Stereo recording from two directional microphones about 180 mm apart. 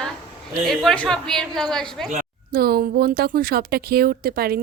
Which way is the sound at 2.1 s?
55° right (ahead or behind).